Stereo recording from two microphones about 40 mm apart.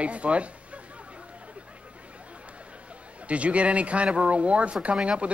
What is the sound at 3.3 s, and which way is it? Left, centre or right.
A man's voice, right.